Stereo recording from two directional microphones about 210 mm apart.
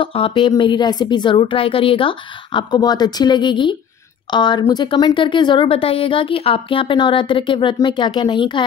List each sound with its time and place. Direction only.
0.0 s speech: 25° left (ahead or behind)